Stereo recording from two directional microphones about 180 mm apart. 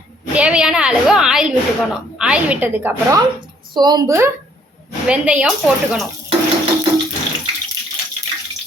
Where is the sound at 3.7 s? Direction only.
20° right (ahead or behind).